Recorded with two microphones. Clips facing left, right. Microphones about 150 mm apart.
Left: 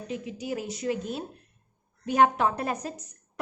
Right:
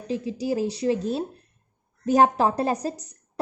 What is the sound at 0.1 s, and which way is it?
A woman's voice, 30° right (ahead or behind).